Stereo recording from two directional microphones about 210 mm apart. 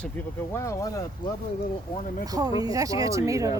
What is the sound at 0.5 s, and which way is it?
Speech, 15° left (ahead or behind).